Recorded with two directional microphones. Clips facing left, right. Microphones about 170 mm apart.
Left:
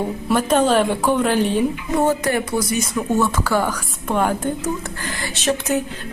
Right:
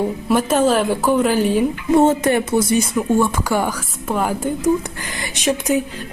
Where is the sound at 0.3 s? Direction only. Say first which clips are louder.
Even; 5° right (ahead or behind).